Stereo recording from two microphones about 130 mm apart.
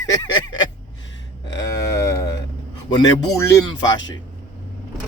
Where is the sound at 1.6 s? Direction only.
30° left (ahead or behind).